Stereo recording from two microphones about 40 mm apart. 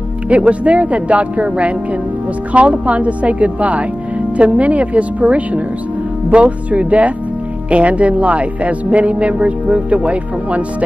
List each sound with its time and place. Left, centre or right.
0.3 s speech: right